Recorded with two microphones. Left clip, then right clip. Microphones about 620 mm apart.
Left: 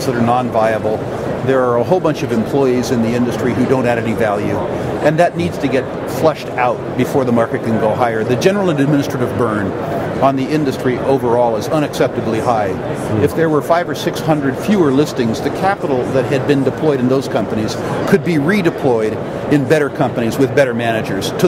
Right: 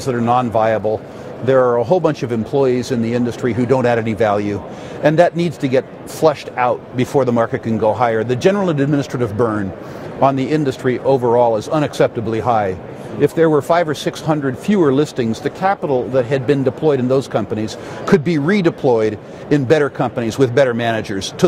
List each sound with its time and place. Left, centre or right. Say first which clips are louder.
0.0 s a man's voice: left 1 dB; right